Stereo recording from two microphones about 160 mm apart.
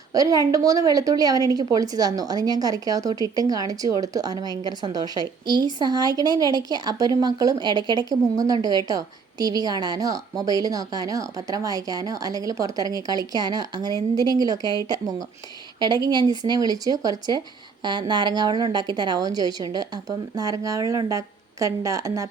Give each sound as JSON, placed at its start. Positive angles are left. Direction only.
{"t": 0.1, "sound": "a woman's voice", "side_deg": -20}